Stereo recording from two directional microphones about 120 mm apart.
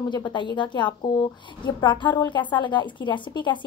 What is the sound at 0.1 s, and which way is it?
A woman's voice, 40° left (ahead or behind).